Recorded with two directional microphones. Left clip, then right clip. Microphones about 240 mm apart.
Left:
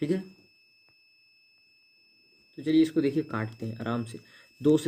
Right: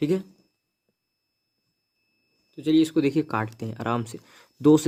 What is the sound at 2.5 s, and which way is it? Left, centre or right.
Speech, right.